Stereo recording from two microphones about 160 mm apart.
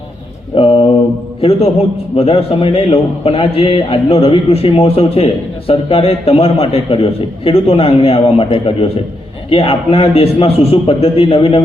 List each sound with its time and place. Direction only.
0.5 s mantra: 35° left (ahead or behind)
1.4 s a man's voice: 35° left (ahead or behind)